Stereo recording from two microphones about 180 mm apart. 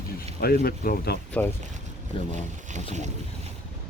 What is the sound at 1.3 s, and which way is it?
Speech, 10° left (ahead or behind).